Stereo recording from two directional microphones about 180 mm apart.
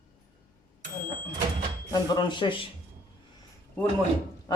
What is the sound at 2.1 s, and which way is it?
Speech, 25° left (ahead or behind).